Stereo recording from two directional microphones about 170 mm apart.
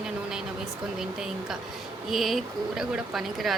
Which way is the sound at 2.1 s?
Centre (ahead or behind).